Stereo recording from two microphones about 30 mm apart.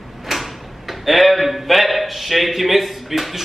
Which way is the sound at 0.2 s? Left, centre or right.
Centre.